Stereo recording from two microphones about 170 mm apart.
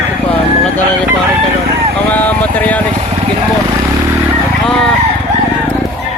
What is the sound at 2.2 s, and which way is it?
Vehicle, 10° left (ahead or behind).